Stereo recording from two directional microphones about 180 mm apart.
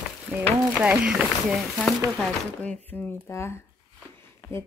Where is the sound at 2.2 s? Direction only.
5° left (ahead or behind).